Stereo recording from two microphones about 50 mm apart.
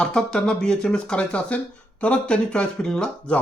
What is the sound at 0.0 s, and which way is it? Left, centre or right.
Speech, centre.